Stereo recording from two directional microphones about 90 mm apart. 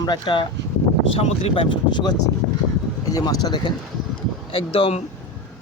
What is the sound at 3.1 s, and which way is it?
Speech, 45° left (ahead or behind).